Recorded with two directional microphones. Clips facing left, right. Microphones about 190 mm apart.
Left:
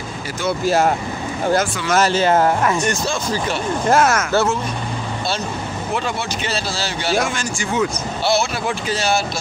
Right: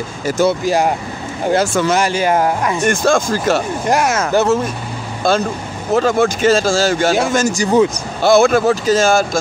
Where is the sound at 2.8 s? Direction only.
50° right (ahead or behind).